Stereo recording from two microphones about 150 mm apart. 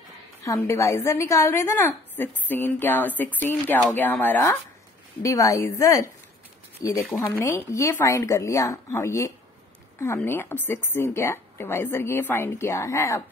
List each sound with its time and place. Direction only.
0.5 s a woman's voice: 20° left (ahead or behind)